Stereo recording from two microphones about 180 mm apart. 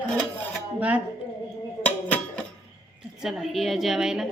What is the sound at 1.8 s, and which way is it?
Music, 5° left (ahead or behind).